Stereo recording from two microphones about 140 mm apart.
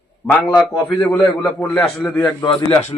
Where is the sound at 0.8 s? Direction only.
10° left (ahead or behind).